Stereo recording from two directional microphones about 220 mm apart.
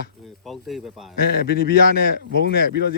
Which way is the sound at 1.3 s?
45° left (ahead or behind).